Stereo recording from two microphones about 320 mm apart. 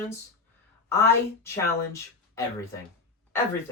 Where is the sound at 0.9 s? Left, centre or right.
Centre.